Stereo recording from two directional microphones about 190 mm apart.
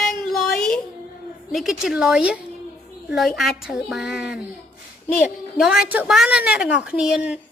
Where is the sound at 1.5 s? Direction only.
5° right (ahead or behind).